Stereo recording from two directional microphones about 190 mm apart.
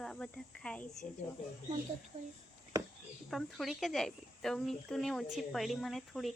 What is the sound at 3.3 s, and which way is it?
Speech, centre (ahead or behind).